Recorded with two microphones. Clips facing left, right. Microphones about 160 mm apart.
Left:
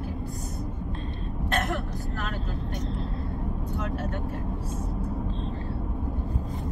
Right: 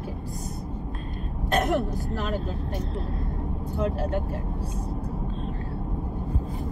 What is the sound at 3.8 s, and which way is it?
Speech, 30° right (ahead or behind).